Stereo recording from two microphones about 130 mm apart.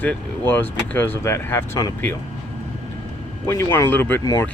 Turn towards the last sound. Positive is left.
turn(degrees=15)  # may be behind; listen again after turning